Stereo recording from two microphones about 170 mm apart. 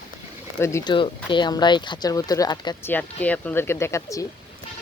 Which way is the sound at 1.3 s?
25° left (ahead or behind).